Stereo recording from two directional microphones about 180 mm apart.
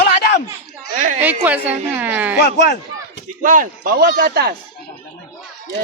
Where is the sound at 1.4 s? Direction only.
10° right (ahead or behind).